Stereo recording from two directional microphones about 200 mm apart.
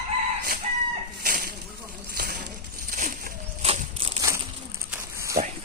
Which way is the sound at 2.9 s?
40° right (ahead or behind).